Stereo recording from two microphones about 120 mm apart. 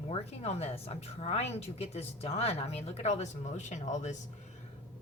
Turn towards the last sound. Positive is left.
turn(degrees=80)